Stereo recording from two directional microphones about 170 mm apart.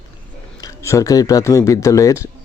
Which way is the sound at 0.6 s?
15° left (ahead or behind).